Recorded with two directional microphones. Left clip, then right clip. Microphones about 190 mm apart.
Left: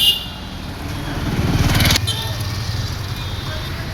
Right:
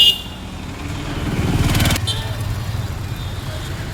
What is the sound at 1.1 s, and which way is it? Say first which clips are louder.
Vehicle: left 1 dB; 35° left (ahead or behind).